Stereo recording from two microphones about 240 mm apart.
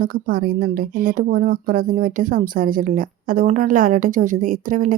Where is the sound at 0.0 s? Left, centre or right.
Right.